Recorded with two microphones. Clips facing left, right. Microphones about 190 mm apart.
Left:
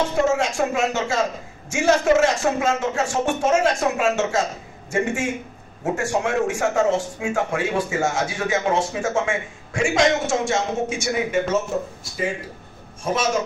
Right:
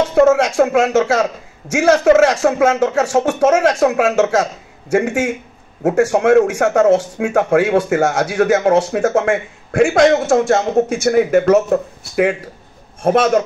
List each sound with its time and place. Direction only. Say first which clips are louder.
0.1 s a man's voice: right 9 dB; 75° right (ahead or behind)